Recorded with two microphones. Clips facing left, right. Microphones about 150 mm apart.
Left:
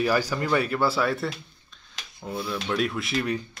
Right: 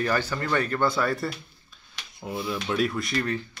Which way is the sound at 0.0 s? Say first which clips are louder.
Left 2 dB; 10° left (ahead or behind).